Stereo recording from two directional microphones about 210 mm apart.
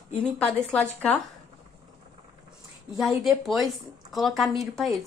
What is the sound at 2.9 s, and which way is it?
Speech, centre (ahead or behind).